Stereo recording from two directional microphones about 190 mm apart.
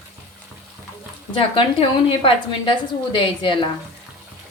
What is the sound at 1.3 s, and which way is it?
Speech, 30° left (ahead or behind).